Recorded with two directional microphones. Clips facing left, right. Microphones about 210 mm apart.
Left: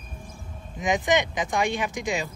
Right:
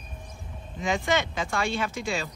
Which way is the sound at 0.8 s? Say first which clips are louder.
Left 3 dB; 15° left (ahead or behind).